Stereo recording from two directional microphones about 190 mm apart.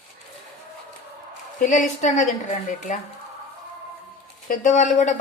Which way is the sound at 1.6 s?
40° left (ahead or behind).